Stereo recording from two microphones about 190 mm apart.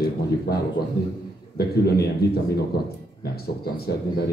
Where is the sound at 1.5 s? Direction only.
55° left (ahead or behind).